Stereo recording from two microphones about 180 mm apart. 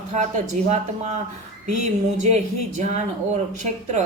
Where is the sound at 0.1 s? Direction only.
40° right (ahead or behind).